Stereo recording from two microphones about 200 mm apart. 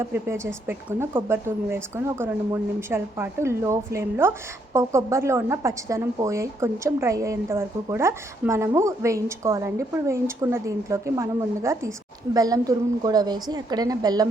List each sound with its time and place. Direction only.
0.0 s a woman's voice: 15° right (ahead or behind)